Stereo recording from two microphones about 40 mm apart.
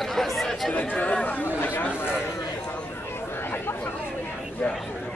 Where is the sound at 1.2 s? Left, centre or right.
Left.